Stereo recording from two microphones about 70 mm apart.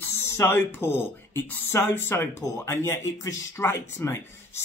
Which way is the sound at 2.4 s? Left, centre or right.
Left.